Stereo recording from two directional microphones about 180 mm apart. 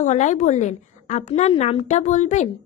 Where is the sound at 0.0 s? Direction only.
40° left (ahead or behind).